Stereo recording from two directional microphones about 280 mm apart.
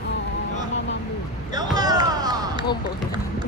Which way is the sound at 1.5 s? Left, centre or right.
Centre.